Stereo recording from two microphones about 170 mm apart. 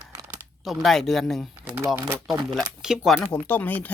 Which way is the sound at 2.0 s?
15° right (ahead or behind).